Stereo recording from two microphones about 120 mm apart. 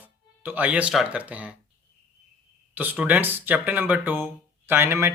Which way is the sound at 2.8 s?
15° right (ahead or behind).